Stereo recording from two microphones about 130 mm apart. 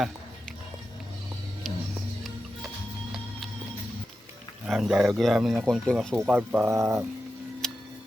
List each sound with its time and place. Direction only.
4.7 s speech: centre (ahead or behind)
6.2 s speech: 15° right (ahead or behind)
7.6 s music: 5° left (ahead or behind)